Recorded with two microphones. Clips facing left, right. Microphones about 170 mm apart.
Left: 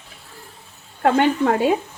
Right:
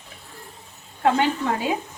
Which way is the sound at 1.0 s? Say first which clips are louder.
Left 4 dB; 50° left (ahead or behind).